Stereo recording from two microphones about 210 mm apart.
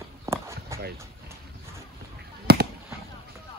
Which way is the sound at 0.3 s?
15° right (ahead or behind).